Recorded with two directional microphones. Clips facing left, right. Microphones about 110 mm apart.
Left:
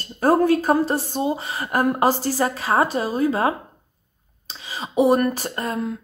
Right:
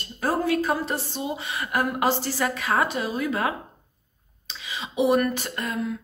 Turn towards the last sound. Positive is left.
turn(degrees=40)  # may be behind; listen again after turning